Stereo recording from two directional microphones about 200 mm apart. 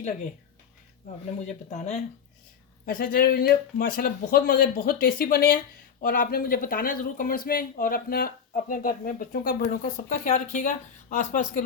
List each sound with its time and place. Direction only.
1.7 s speech: 35° left (ahead or behind)
2.8 s speech: 45° left (ahead or behind)